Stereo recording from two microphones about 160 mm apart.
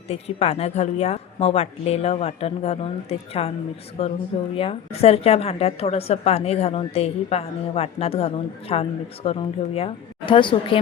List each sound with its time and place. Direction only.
0.1 s a woman's voice: 40° left (ahead or behind)